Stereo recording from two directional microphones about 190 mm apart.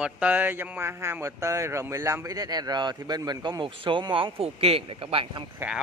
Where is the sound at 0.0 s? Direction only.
10° right (ahead or behind); by 5.4 s 30° right (ahead or behind).